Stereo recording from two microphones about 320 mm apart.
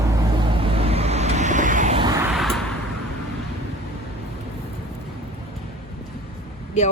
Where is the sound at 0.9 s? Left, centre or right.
Centre.